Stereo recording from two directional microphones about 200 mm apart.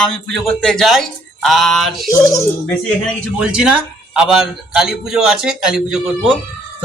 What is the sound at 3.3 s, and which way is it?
A man's voice, 5° right (ahead or behind).